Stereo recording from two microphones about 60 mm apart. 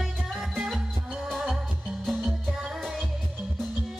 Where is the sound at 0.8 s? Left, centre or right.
Centre.